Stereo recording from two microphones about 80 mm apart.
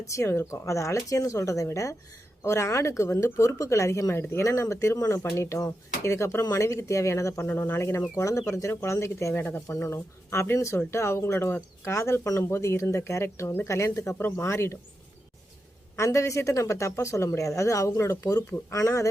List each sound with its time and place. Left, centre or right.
0.0 s speech: left
16.0 s speech: left